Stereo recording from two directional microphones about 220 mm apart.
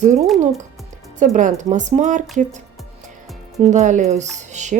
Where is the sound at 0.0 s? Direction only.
30° right (ahead or behind).